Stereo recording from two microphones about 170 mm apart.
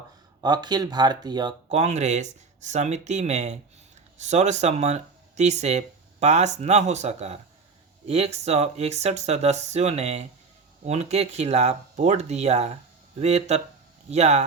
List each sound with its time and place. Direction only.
0.4 s speech: 25° right (ahead or behind)
1.7 s speech: 40° right (ahead or behind)